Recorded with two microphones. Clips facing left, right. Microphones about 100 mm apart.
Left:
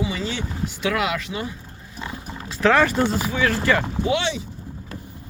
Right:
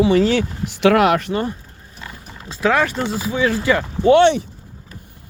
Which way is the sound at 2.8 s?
Centre (ahead or behind).